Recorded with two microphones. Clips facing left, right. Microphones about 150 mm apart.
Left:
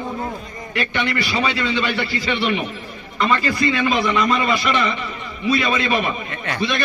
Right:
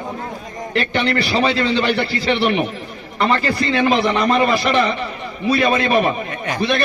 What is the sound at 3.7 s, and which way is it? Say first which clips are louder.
Speech: right 3 dB; 40° right (ahead or behind).